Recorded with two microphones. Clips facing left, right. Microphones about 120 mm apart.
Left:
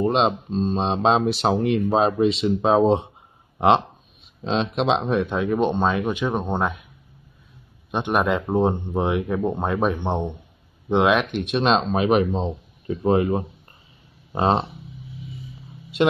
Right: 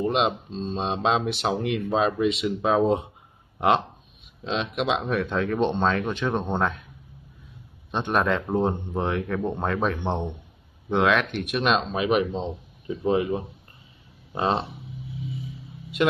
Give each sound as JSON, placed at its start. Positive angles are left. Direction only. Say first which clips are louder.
{"t": 0.0, "sound": "speech", "louder": "left 3 dB", "side_deg": 35}
{"t": 0.7, "sound": "speech", "louder": "left 3 dB", "side_deg": 35}
{"t": 7.9, "sound": "speech", "louder": "left 2 dB", "side_deg": 15}